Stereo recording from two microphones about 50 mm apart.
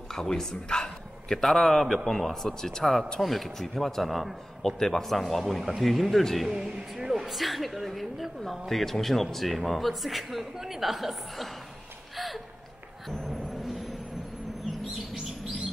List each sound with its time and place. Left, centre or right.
0.1 s a man's voice: centre
6.5 s speech: centre
13.3 s vehicle: centre